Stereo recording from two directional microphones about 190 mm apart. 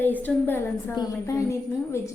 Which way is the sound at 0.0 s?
10° left (ahead or behind).